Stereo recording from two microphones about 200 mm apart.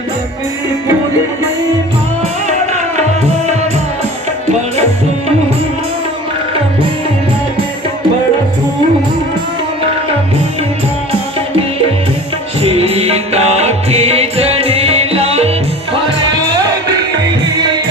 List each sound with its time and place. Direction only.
3.4 s music: 35° right (ahead or behind)
12.6 s music: 30° right (ahead or behind)